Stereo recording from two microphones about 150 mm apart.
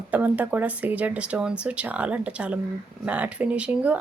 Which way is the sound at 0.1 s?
10° right (ahead or behind).